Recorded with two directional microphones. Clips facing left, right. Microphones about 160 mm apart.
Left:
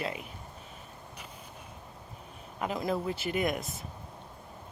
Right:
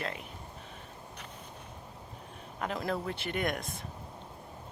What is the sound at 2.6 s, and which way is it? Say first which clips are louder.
Speech: left 2 dB; 5° left (ahead or behind).